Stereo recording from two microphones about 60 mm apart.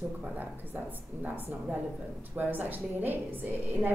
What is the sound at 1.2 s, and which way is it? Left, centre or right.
A woman's voice, right.